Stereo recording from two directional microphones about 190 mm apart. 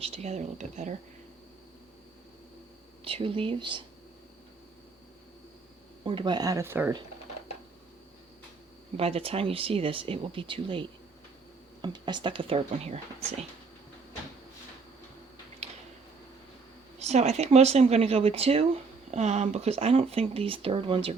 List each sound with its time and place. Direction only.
0.0 s speech: 35° right (ahead or behind)
3.0 s speech: 30° right (ahead or behind)
6.1 s speech: 25° right (ahead or behind)
9.0 s speech: 30° right (ahead or behind)
15.6 s a sound: 35° right (ahead or behind)
17.0 s speech: 35° right (ahead or behind)